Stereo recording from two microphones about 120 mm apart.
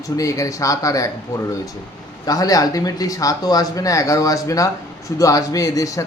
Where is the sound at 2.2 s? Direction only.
30° left (ahead or behind).